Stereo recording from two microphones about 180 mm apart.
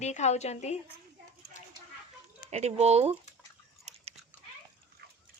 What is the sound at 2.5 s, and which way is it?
Speech, 35° right (ahead or behind).